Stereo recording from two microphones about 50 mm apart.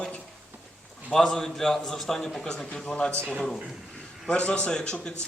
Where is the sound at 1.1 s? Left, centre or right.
Centre.